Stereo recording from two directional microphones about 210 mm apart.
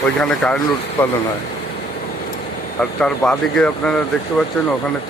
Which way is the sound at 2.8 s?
5° left (ahead or behind).